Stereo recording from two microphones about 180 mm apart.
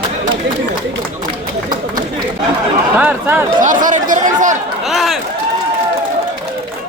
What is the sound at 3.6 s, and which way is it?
Speech, 45° right (ahead or behind).